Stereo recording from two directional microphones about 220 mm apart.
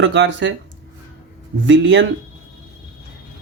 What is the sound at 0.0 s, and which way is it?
Speech, 55° right (ahead or behind).